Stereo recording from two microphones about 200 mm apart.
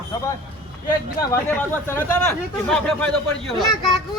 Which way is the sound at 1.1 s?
15° left (ahead or behind).